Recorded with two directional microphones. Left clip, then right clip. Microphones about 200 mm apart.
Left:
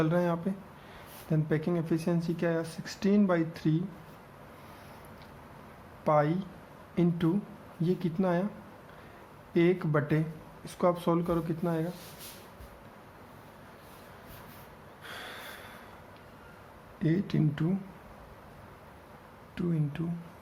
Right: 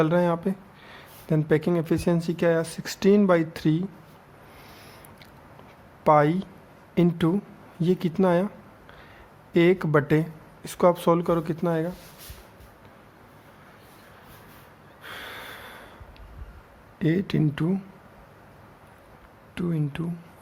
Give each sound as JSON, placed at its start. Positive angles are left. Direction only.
{"t": 0.0, "sound": "speech", "side_deg": -40}
{"t": 6.1, "sound": "speech", "side_deg": -40}
{"t": 9.5, "sound": "speech", "side_deg": -40}
{"t": 15.0, "sound": "snort", "side_deg": -30}
{"t": 17.0, "sound": "speech", "side_deg": -35}
{"t": 19.5, "sound": "speech", "side_deg": -35}